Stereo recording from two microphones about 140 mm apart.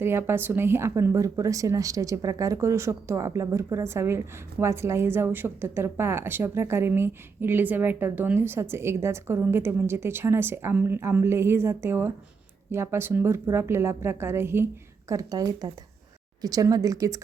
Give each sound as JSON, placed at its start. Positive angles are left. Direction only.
{"t": 0.0, "sound": "a woman's voice", "side_deg": -15}